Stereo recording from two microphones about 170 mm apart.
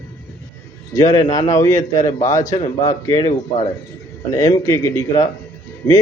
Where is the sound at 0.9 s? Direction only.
20° left (ahead or behind).